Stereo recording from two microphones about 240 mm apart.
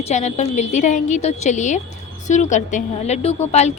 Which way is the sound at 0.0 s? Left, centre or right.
Left.